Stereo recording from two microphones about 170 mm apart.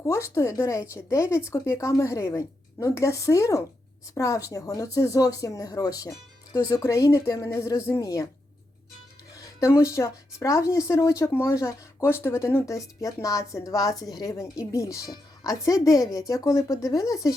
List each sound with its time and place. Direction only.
0.0 s speech: 20° left (ahead or behind)
9.3 s speech: 15° left (ahead or behind)